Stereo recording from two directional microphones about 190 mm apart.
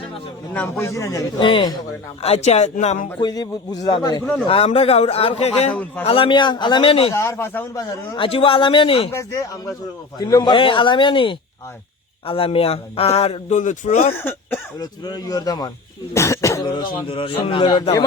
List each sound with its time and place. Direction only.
0.5 s a man's voice: 10° left (ahead or behind); by 3.1 s 35° left (ahead or behind)
3.2 s a man's voice: 20° left (ahead or behind)
5.7 s a man's voice: 10° left (ahead or behind)
6.1 s a man's voice: 25° left (ahead or behind)
7.1 s a man's voice: 15° left (ahead or behind)
9.0 s a man's voice: 15° left (ahead or behind); by 14.1 s 40° left (ahead or behind)
14.2 s a man's voice: 10° left (ahead or behind)